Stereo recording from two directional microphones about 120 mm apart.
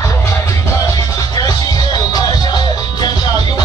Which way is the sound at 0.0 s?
25° left (ahead or behind).